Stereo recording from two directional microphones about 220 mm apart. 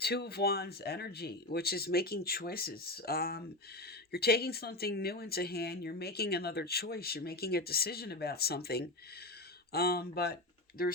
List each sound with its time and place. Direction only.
0.0 s speech: 45° left (ahead or behind)